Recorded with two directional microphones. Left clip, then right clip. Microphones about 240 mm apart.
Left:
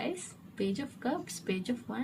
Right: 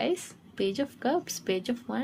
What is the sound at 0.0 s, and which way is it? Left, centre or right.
A woman's voice, right.